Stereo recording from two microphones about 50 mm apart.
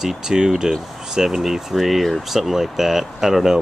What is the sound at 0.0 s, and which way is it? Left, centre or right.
Speech, centre.